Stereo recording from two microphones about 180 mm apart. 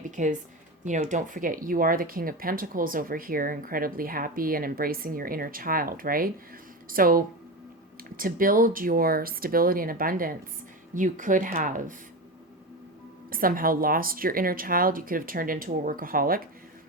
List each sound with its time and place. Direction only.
0.0 s a sound: 45° right (ahead or behind)
0.9 s speech: 45° right (ahead or behind)
13.3 s speech: 50° right (ahead or behind)